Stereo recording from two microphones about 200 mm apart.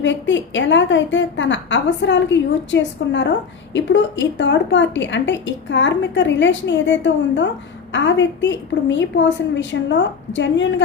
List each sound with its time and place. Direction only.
0.0 s a woman's voice: 65° left (ahead or behind)